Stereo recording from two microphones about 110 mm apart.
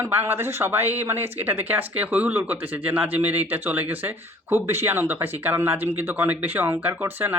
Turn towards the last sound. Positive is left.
turn(degrees=-20)  # may be behind; listen again after turning